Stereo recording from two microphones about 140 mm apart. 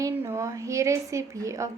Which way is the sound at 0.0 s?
20° right (ahead or behind).